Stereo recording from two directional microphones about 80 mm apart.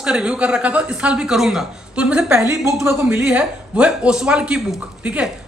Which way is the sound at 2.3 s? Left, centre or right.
Right.